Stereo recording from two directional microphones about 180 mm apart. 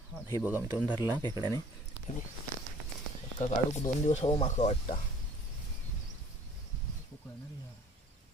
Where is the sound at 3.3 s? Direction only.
40° left (ahead or behind).